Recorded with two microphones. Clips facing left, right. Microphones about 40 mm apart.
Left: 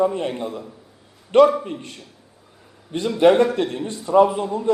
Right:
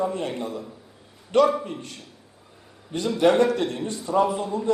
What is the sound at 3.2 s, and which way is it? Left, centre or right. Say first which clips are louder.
A man's voice: left 4 dB; left.